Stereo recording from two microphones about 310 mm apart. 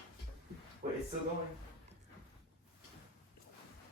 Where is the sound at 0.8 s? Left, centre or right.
Right.